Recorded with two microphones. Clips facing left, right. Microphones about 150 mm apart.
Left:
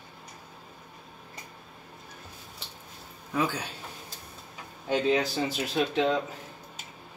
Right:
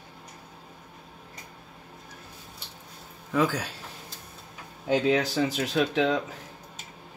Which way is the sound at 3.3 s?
90° right.